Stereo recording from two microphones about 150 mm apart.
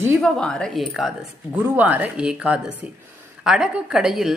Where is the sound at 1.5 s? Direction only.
10° right (ahead or behind).